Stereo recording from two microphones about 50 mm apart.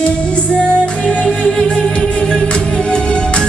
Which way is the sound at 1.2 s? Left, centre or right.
Centre.